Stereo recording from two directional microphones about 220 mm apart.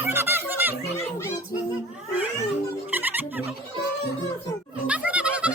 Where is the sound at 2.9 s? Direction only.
10° right (ahead or behind).